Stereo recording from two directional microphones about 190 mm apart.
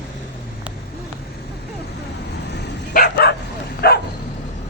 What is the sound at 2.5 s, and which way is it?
Dog, 60° left (ahead or behind).